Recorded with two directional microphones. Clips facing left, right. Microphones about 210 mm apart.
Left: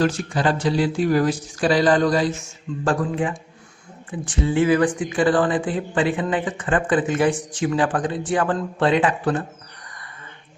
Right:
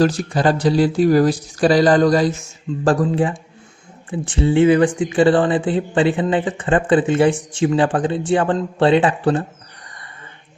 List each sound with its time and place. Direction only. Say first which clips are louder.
0.0 s speech: right 4 dB; 35° right (ahead or behind)